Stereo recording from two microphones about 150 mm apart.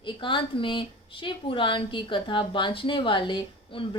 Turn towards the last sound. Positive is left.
turn(degrees=35)  # may be behind; listen again after turning